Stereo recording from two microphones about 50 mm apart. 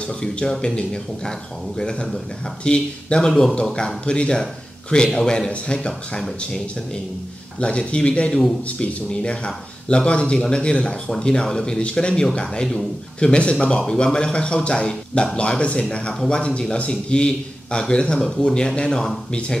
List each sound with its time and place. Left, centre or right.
0.0 s speech: centre
7.6 s speech: left